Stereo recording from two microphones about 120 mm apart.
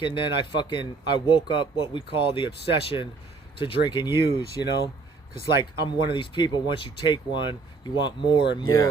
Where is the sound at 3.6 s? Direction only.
40° left (ahead or behind).